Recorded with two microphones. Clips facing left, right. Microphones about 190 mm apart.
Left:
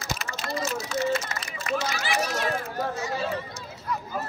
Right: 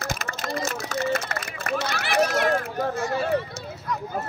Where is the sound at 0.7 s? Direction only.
55° right (ahead or behind).